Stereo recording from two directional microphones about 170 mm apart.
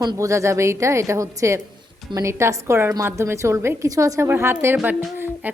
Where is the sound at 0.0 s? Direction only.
20° right (ahead or behind).